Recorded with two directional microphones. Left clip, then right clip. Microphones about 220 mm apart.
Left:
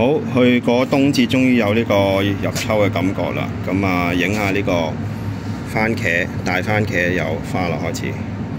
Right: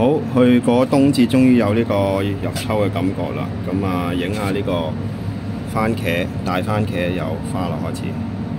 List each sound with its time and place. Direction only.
0.0 s speech: 5° right (ahead or behind)
3.8 s speech: 10° left (ahead or behind)
5.8 s speech: 5° right (ahead or behind)